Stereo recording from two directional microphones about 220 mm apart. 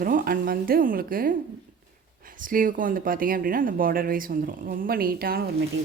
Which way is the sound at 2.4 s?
40° right (ahead or behind).